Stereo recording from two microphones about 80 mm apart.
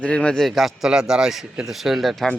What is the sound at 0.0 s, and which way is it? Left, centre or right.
A man's voice, centre.